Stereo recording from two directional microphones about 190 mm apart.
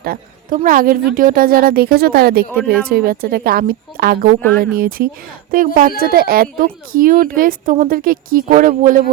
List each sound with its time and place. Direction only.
0.0 s a woman's voice: 50° right (ahead or behind)